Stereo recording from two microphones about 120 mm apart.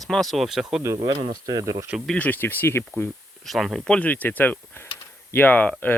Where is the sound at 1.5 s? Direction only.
30° right (ahead or behind).